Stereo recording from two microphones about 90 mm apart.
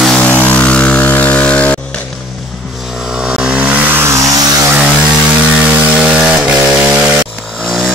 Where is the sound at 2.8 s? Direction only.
5° right (ahead or behind); by 4.5 s 40° right (ahead or behind).